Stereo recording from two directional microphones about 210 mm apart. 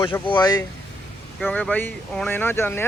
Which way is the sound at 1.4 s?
5° left (ahead or behind).